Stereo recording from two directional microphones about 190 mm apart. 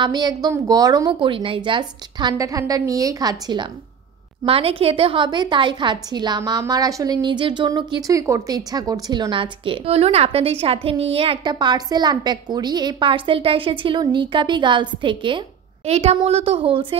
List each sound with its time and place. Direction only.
0.0 s a woman's voice: 20° right (ahead or behind)